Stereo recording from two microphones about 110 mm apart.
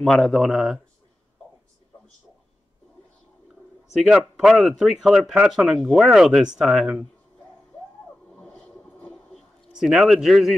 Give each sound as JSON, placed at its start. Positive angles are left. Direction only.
{"t": 0.0, "sound": "a man's voice", "side_deg": 5}
{"t": 4.1, "sound": "a man's voice", "side_deg": -5}
{"t": 8.3, "sound": "a sound", "side_deg": 10}
{"t": 9.7, "sound": "a man's voice", "side_deg": -5}